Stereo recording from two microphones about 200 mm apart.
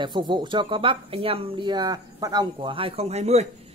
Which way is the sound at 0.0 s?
25° right (ahead or behind).